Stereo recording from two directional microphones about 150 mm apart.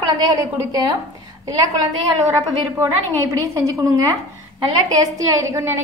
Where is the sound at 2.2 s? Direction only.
20° right (ahead or behind).